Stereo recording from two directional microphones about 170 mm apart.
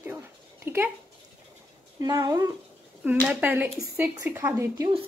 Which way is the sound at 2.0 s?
25° right (ahead or behind).